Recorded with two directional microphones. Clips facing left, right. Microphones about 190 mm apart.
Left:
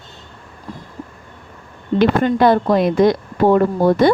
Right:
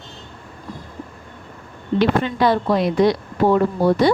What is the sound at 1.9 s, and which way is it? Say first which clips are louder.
Speech: left 4 dB; 50° left (ahead or behind).